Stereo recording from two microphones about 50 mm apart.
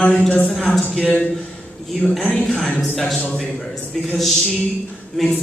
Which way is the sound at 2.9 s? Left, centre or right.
Centre.